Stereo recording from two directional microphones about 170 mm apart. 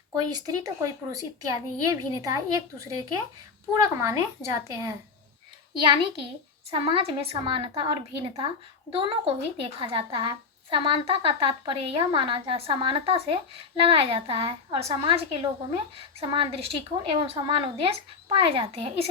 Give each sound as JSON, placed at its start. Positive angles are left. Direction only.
{"t": 0.1, "sound": "a woman's voice", "side_deg": -20}